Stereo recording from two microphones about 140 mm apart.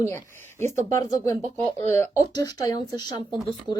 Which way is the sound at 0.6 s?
55° right (ahead or behind).